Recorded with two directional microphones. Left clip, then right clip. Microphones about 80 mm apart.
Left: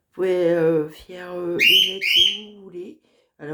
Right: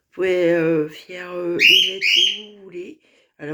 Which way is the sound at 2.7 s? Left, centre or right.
Left.